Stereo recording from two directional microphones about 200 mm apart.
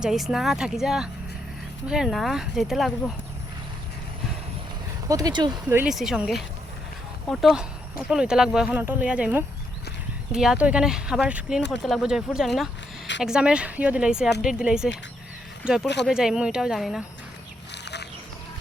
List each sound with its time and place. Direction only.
0.0 s speech: centre (ahead or behind)
5.0 s speech: 20° right (ahead or behind)
5.5 s speech: 5° right (ahead or behind)
17.8 s a sound: 60° left (ahead or behind)